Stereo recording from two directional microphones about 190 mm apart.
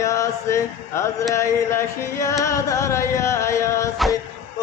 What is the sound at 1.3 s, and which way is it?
Music, 15° left (ahead or behind).